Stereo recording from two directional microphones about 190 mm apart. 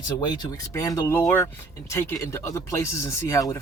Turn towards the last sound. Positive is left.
turn(degrees=15)  # may be behind; listen again after turning